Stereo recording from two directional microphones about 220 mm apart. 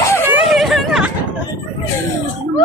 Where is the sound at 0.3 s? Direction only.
5° right (ahead or behind).